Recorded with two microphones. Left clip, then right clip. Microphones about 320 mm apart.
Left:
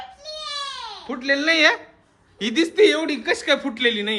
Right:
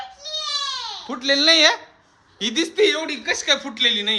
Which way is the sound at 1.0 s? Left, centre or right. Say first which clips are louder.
Right 3 dB; centre.